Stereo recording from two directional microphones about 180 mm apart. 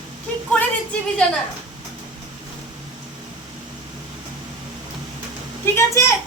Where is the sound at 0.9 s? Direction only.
5° left (ahead or behind).